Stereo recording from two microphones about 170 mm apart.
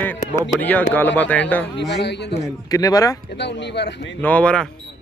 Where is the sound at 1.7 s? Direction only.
90° left.